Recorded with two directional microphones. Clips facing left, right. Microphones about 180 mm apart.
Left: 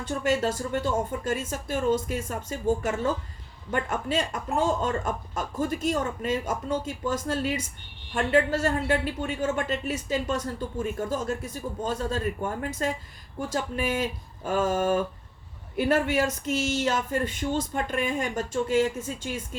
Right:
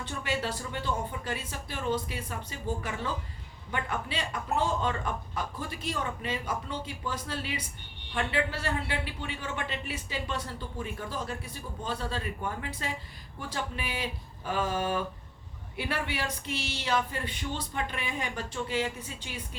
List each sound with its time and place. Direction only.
0.0 s a man's voice: 45° left (ahead or behind)